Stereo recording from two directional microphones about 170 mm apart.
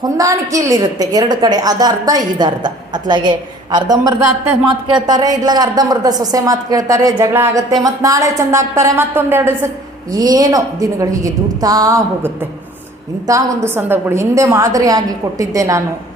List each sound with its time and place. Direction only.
0.0 s a woman's voice: 20° right (ahead or behind)